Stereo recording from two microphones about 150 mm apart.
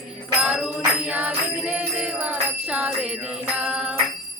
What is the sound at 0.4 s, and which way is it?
Music, 5° right (ahead or behind).